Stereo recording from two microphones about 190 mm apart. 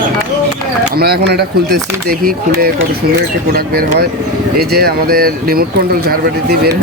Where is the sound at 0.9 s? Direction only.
55° right (ahead or behind).